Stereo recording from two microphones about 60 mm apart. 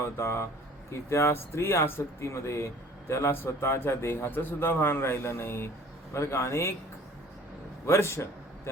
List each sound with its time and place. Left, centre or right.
0.0 s speech: left
7.9 s a man's voice: left